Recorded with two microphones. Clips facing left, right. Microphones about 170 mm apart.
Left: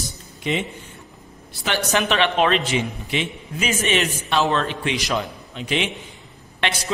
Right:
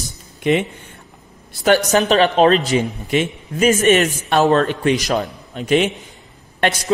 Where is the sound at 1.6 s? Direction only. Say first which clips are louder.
Right 8 dB; 40° right (ahead or behind).